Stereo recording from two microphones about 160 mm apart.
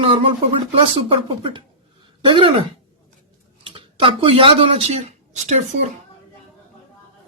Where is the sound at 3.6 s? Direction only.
30° right (ahead or behind).